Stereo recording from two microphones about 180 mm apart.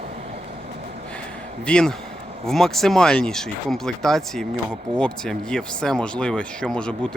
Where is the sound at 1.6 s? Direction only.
5° left (ahead or behind).